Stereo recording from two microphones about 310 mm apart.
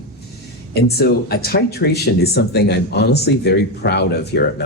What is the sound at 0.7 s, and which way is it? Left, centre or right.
Speech, left.